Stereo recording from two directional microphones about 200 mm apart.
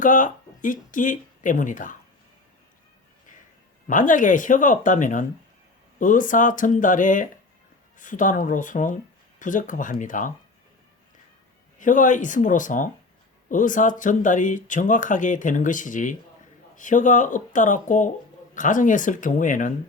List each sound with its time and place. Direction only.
0.0 s speech: 40° left (ahead or behind)
3.8 s speech: 40° left (ahead or behind)
11.8 s speech: 40° left (ahead or behind)